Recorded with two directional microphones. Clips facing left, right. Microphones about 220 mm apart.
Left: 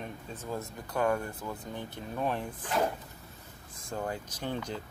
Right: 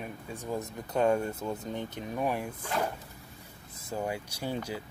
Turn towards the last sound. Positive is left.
turn(degrees=-10)  # may be behind; listen again after turning